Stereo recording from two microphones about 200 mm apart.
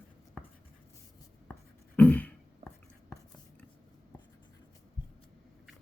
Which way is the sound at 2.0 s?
10° left (ahead or behind).